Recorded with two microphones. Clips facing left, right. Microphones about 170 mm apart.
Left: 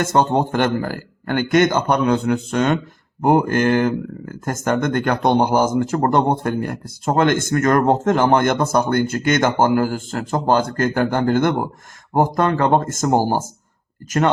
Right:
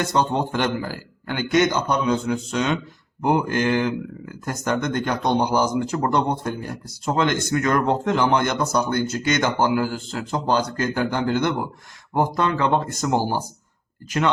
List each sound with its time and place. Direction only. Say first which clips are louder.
0.0 s speech: left 4 dB; 45° left (ahead or behind)